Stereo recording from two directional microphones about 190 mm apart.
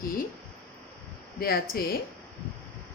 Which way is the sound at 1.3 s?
55° left (ahead or behind).